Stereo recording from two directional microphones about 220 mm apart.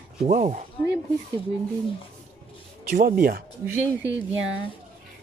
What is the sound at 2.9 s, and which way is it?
Speech, 40° right (ahead or behind).